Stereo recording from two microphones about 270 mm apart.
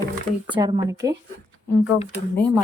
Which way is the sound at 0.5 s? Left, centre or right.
Centre.